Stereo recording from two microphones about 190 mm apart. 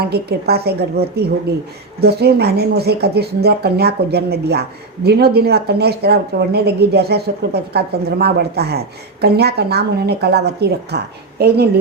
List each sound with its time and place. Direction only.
0.0 s speech: 55° right (ahead or behind)